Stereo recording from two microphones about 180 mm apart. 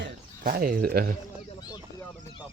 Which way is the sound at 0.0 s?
55° right (ahead or behind).